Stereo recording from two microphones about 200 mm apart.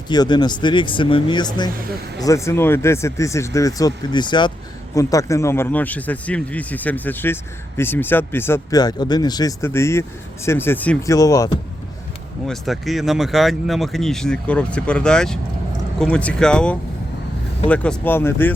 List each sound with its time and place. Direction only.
0.1 s speech: 20° left (ahead or behind)
12.5 s speech: centre (ahead or behind)